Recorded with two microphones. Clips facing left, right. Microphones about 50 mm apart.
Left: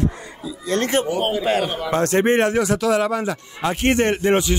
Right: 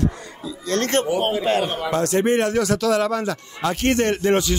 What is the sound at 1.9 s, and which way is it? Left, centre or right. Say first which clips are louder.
Speech: left 2 dB; left.